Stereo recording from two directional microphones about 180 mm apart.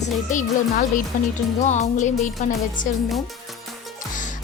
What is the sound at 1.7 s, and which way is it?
Music, 40° left (ahead or behind).